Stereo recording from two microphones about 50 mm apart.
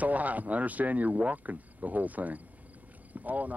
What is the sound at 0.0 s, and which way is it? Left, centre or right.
Speech, right.